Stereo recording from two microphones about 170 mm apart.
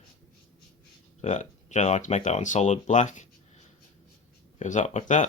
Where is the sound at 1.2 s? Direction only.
45° left (ahead or behind).